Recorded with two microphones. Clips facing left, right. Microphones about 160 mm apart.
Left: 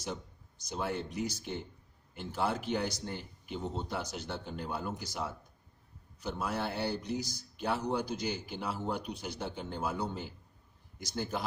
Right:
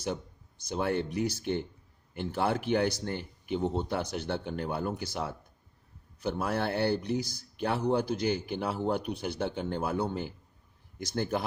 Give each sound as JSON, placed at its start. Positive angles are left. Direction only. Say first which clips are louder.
{"t": 0.6, "sound": "speech", "louder": "right 6 dB", "side_deg": -60}